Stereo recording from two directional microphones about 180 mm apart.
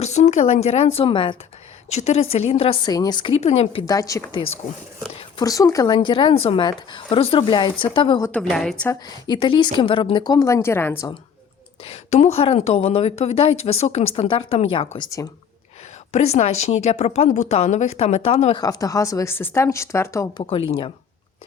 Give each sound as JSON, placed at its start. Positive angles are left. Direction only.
{"t": 0.0, "sound": "a woman's voice", "side_deg": 40}
{"t": 1.9, "sound": "a woman's voice", "side_deg": 40}
{"t": 3.8, "sound": "a woman's voice", "side_deg": 20}
{"t": 8.2, "sound": "a woman's voice", "side_deg": 5}
{"t": 8.9, "sound": "a woman's voice", "side_deg": 20}
{"t": 11.8, "sound": "a woman's voice", "side_deg": 35}
{"t": 16.1, "sound": "a woman's voice", "side_deg": 40}
{"t": 18.6, "sound": "a woman's voice", "side_deg": 20}
{"t": 20.4, "sound": "a woman's voice", "side_deg": 30}